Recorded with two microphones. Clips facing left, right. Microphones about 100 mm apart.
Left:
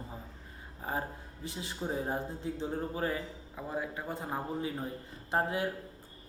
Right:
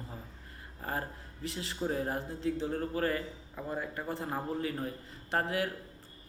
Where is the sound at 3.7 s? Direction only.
5° left (ahead or behind).